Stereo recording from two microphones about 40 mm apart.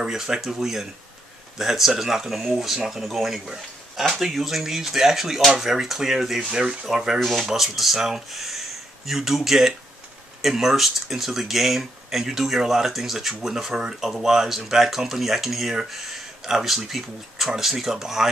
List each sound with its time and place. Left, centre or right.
0.0 s speech: centre
6.5 s speech: right
6.9 s speech: centre
7.2 s speech: centre